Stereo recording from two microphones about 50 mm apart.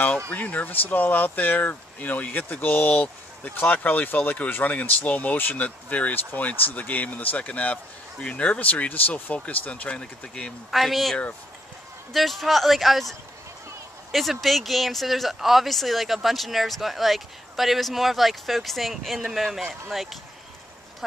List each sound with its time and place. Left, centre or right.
0.3 s speech: left
10.7 s speech: centre
14.1 s speech: centre